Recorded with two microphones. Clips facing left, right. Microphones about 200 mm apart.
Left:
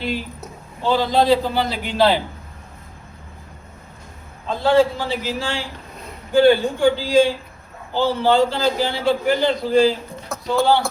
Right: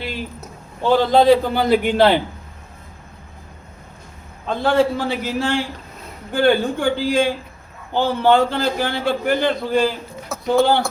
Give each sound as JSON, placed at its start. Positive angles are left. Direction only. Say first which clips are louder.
{"t": 0.8, "sound": "a man's voice", "louder": "right 3 dB", "side_deg": -55}
{"t": 4.4, "sound": "a man's voice", "louder": "left 1 dB", "side_deg": -55}
{"t": 10.3, "sound": "a sound", "louder": "right 1 dB", "side_deg": 0}